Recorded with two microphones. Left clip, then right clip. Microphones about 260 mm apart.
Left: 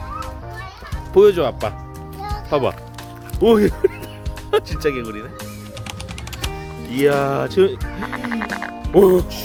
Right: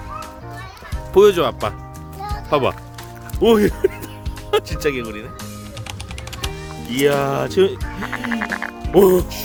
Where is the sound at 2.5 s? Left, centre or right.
Centre.